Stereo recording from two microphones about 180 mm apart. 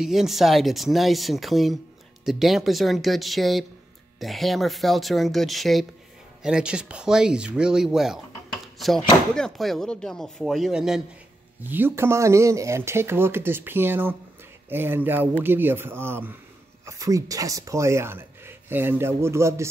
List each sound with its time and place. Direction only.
0.0 s speech: centre (ahead or behind)